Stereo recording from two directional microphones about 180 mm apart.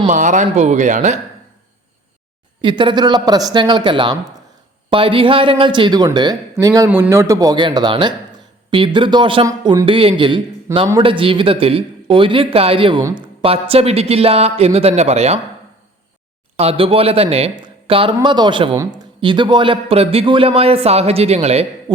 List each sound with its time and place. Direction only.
0.1 s speech: 45° right (ahead or behind)
2.6 s speech: 25° right (ahead or behind)
10.7 s a man's voice: 15° right (ahead or behind)
11.0 s speech: 30° right (ahead or behind)
13.0 s a man's voice: 15° right (ahead or behind)
13.4 s a man's voice: 30° right (ahead or behind)
16.6 s a man's voice: 30° right (ahead or behind)